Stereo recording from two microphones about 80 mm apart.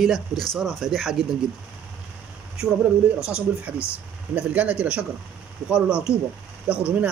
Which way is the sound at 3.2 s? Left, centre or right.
Centre.